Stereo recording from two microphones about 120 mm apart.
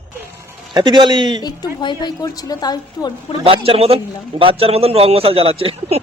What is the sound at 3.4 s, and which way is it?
A man's voice, 50° right (ahead or behind).